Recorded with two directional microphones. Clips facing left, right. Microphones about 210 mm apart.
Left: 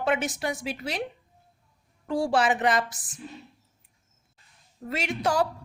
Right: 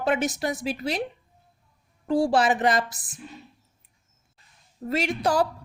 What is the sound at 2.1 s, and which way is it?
Speech, 35° right (ahead or behind).